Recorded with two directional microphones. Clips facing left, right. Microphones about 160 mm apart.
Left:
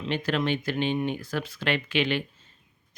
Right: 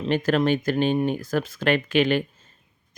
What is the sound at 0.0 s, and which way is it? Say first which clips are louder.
Speech: right 6 dB; 45° right (ahead or behind).